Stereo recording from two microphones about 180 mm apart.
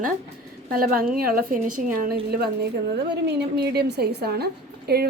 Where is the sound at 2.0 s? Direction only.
60° right (ahead or behind).